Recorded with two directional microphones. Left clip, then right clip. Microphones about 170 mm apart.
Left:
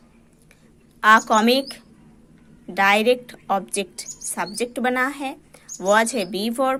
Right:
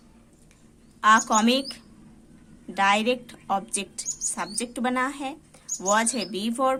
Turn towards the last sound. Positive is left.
turn(degrees=25)  # may be behind; listen again after turning